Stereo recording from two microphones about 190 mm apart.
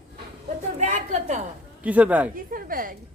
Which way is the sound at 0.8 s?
40° right (ahead or behind).